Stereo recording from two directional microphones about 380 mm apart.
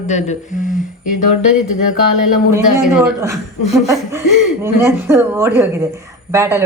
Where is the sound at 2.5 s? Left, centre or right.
Centre.